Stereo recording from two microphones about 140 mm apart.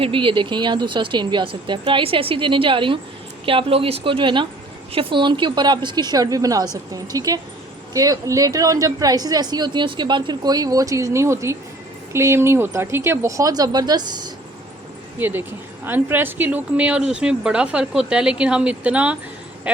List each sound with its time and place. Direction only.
0.0 s speech: 40° right (ahead or behind)
15.2 s speech: 15° right (ahead or behind)